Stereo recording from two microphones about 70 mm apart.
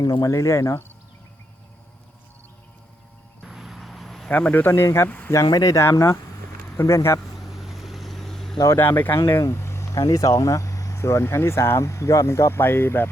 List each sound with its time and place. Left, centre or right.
0.0 s speech: left
3.4 s vehicle: centre
4.3 s speech: left
5.0 s speech: left
5.3 s speech: left
7.3 s vehicle: centre
8.8 s speech: left
9.4 s a sound: left
9.9 s speech: left